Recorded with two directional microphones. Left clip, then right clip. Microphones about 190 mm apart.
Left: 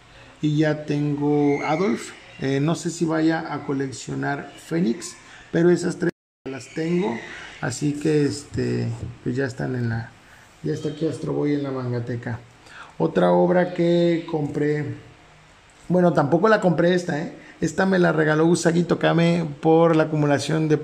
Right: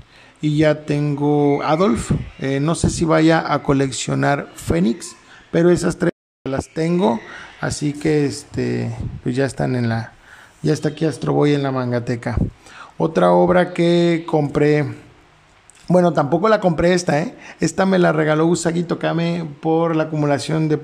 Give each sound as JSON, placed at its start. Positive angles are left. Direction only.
{"t": 0.4, "sound": "speech", "side_deg": -20}
{"t": 5.5, "sound": "a sound", "side_deg": -20}
{"t": 6.7, "sound": "speech", "side_deg": -35}
{"t": 7.6, "sound": "speech", "side_deg": -15}
{"t": 10.6, "sound": "speech", "side_deg": -40}
{"t": 12.7, "sound": "speech", "side_deg": -10}
{"t": 16.0, "sound": "speech", "side_deg": -15}
{"t": 17.7, "sound": "speech", "side_deg": -15}